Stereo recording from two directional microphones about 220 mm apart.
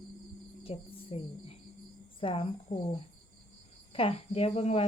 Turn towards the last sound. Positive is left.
turn(degrees=30)  # may be behind; listen again after turning